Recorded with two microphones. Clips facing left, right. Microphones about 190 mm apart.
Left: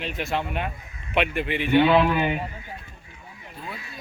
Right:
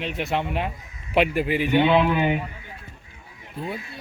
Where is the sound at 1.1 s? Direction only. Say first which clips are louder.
Right 4 dB; 35° right (ahead or behind).